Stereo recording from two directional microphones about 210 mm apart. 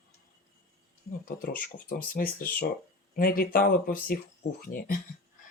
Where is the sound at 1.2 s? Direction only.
40° left (ahead or behind).